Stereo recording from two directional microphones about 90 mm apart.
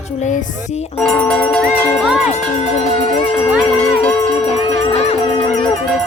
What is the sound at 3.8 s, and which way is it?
Music, 15° left (ahead or behind).